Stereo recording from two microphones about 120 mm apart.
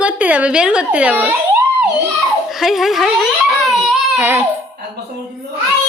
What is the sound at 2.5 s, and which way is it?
Speech, centre (ahead or behind).